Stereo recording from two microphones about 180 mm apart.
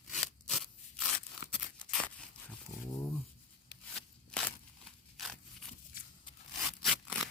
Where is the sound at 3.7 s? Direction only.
65° left (ahead or behind).